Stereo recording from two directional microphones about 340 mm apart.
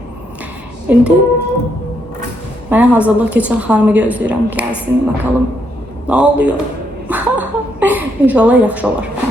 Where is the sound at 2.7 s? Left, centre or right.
Centre.